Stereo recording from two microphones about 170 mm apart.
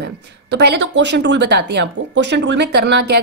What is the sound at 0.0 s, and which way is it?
A woman's voice, 75° right (ahead or behind).